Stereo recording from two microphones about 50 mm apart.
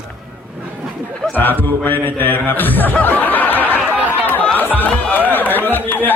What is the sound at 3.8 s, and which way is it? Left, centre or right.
Chatter, right.